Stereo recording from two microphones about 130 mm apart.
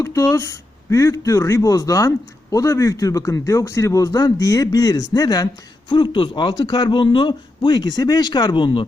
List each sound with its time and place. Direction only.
0.0 s speech: 25° left (ahead or behind)
5.9 s speech: 40° left (ahead or behind)